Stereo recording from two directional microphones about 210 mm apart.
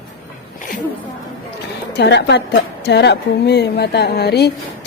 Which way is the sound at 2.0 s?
55° left (ahead or behind).